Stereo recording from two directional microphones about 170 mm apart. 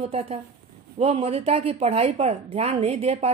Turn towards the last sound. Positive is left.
turn(degrees=-40)  # may be behind; listen again after turning